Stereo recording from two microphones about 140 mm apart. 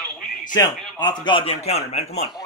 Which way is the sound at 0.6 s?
30° left (ahead or behind).